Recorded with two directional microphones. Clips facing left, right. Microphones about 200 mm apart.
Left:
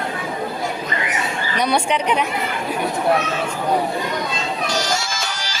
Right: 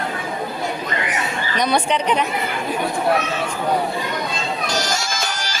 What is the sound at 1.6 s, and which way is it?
Speech, 10° left (ahead or behind).